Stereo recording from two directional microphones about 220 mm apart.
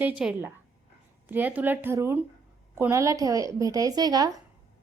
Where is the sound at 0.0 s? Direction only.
5° right (ahead or behind).